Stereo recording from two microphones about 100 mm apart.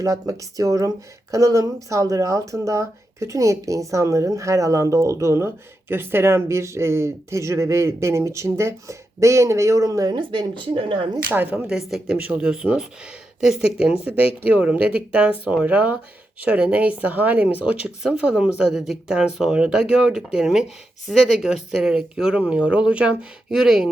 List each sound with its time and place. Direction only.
0.0 s speech: 35° right (ahead or behind)
10.2 s a woman's voice: 55° right (ahead or behind)
11.3 s speech: 20° right (ahead or behind)
11.7 s speech: 5° right (ahead or behind)
12.1 s speech: 15° right (ahead or behind)